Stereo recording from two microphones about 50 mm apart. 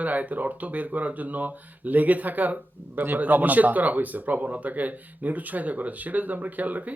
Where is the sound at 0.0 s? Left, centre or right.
Right.